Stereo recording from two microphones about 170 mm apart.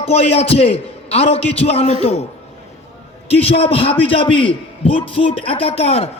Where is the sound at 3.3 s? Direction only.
35° left (ahead or behind).